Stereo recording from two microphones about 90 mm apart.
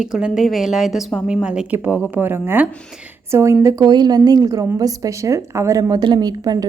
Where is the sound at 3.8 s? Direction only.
50° right (ahead or behind).